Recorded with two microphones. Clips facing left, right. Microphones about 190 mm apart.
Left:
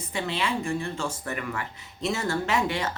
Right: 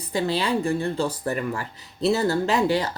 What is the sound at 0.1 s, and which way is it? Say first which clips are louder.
Speech: right 6 dB; 35° right (ahead or behind).